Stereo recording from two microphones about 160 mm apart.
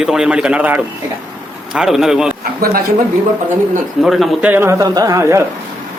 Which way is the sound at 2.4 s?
70° right (ahead or behind).